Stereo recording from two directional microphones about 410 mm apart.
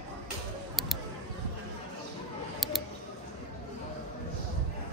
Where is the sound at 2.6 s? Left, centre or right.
Centre.